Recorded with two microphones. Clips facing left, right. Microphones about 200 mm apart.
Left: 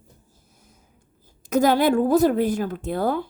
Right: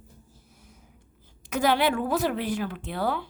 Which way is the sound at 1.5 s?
40° left (ahead or behind).